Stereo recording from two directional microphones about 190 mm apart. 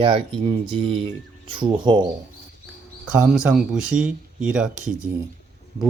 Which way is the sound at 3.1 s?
5° right (ahead or behind).